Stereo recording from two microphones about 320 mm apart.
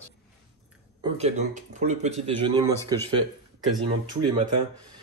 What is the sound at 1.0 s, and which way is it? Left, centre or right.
Speech, centre.